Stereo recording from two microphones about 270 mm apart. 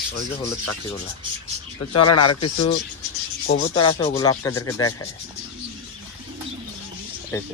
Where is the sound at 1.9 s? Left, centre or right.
Left.